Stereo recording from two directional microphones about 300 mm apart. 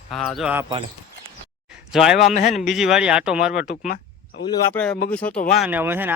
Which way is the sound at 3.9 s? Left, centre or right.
Left.